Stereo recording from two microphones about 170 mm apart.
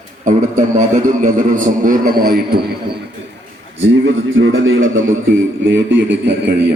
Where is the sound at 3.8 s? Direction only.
90° right.